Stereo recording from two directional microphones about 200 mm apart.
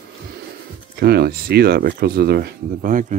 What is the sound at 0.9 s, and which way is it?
Speech, 50° right (ahead or behind).